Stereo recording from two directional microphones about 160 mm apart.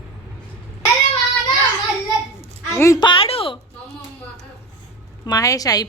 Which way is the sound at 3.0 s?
35° left (ahead or behind).